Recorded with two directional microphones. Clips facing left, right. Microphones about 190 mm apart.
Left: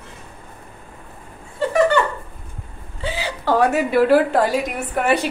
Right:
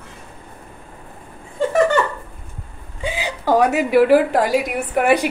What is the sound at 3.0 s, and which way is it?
A woman's voice, 15° right (ahead or behind).